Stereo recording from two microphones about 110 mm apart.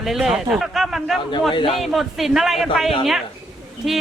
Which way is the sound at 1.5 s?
50° left (ahead or behind).